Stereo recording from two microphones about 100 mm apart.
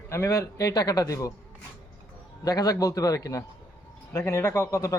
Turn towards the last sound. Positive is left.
turn(degrees=30)  # may be behind; listen again after turning